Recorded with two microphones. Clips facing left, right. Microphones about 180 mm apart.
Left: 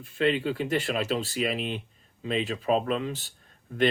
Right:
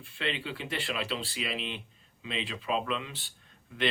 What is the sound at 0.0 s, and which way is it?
Speech, 45° left (ahead or behind).